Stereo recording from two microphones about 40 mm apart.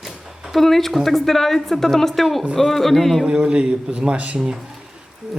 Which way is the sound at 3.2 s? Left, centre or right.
Right.